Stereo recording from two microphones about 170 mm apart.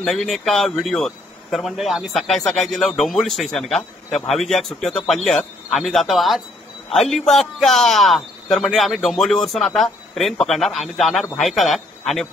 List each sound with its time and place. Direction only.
0.0 s speech: centre (ahead or behind)